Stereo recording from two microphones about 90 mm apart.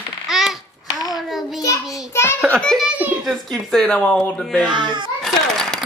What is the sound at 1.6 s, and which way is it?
Child singing, 35° left (ahead or behind).